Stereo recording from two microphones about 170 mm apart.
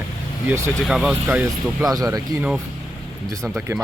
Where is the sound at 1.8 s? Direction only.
20° right (ahead or behind).